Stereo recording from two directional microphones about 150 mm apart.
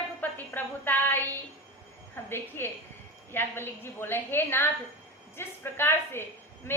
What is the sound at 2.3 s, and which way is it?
A woman's voice, 15° left (ahead or behind).